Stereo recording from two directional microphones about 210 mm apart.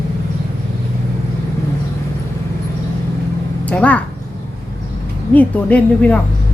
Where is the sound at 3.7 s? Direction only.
5° left (ahead or behind).